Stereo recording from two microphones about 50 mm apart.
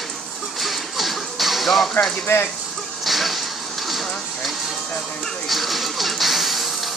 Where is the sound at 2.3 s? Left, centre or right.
Left.